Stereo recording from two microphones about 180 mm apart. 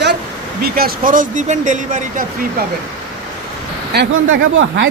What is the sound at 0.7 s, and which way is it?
Speech, 55° right (ahead or behind).